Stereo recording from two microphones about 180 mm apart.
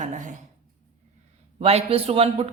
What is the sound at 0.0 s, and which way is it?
Speech, 45° right (ahead or behind).